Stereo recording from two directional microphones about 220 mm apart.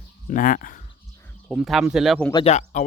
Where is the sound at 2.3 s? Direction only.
25° left (ahead or behind).